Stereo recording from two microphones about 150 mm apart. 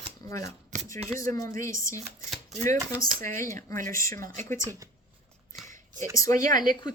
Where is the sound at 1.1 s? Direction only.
20° left (ahead or behind).